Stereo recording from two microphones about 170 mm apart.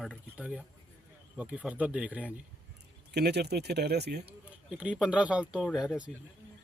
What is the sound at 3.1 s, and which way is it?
Speech, 75° right (ahead or behind).